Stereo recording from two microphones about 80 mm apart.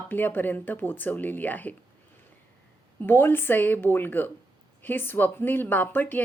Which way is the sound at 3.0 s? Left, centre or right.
Left.